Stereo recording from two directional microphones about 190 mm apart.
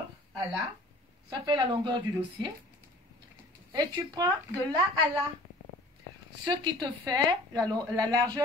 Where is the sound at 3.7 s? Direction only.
20° right (ahead or behind).